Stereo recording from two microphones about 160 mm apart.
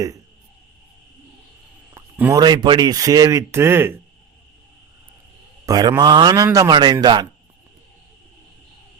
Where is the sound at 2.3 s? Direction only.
25° right (ahead or behind).